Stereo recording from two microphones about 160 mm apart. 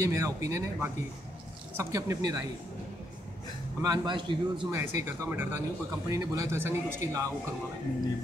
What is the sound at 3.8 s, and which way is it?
Speech, 25° right (ahead or behind).